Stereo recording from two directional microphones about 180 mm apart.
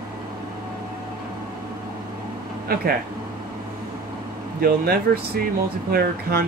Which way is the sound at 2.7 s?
55° right (ahead or behind).